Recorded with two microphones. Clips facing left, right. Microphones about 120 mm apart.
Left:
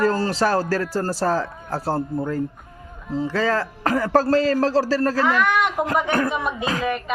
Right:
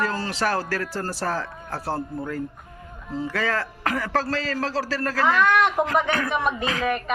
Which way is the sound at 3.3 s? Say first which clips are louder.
Left 4 dB; 30° left (ahead or behind).